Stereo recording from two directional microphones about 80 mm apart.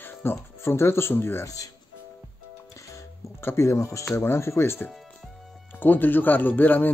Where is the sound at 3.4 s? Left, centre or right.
Left.